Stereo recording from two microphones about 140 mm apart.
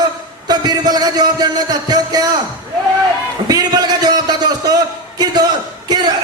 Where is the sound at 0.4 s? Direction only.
30° right (ahead or behind).